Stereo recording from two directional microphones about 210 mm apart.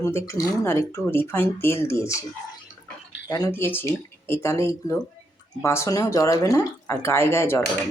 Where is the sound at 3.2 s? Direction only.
15° left (ahead or behind).